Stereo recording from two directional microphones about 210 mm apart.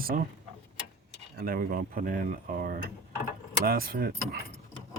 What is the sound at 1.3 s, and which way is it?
Cutlery, 45° right (ahead or behind).